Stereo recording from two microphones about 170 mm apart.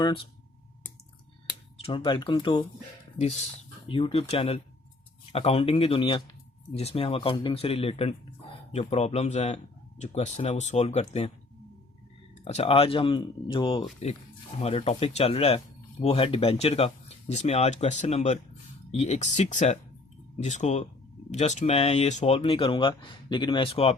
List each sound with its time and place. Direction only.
1.8 s speech: 30° left (ahead or behind)
3.2 s speech: 40° left (ahead or behind)
12.5 s speech: 35° left (ahead or behind)